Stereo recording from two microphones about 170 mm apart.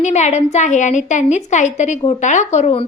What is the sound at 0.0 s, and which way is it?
A woman's voice, 40° left (ahead or behind).